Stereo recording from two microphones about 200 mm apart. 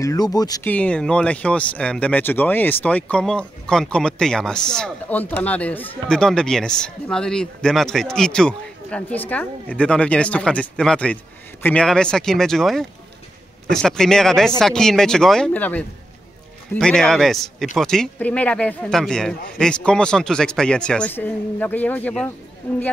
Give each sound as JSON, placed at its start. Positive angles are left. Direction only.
{"t": 0.0, "sound": "speech", "side_deg": 20}
{"t": 0.7, "sound": "speech", "side_deg": 5}